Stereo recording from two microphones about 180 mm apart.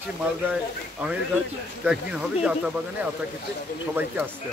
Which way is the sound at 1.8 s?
5° right (ahead or behind).